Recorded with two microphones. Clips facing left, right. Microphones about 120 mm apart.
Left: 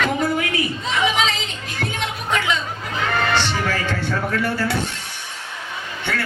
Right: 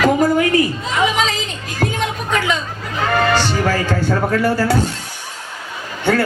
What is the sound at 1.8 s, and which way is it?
Music, 40° right (ahead or behind).